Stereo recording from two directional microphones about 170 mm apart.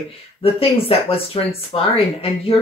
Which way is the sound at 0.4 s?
35° left (ahead or behind).